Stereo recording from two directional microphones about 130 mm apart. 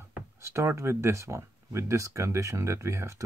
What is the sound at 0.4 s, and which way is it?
Speech, 20° right (ahead or behind).